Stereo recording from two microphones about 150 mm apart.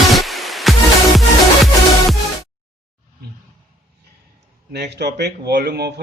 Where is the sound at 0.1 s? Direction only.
Centre (ahead or behind).